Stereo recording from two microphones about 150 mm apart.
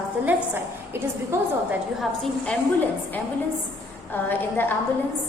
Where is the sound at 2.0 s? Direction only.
Centre (ahead or behind).